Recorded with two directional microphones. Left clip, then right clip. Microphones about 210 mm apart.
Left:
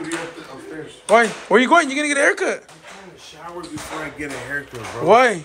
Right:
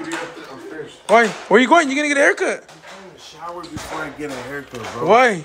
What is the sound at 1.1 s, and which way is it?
Speech, 15° right (ahead or behind).